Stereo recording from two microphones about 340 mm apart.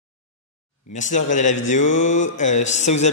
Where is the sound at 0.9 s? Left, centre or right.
Left.